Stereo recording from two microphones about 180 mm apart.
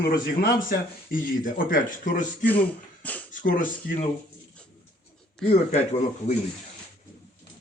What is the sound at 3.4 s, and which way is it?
Speech, 50° left (ahead or behind).